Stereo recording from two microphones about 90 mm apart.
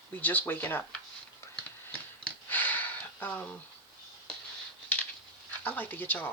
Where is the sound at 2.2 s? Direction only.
20° left (ahead or behind).